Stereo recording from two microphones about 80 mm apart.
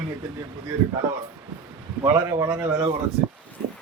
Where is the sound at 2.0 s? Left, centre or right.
Right.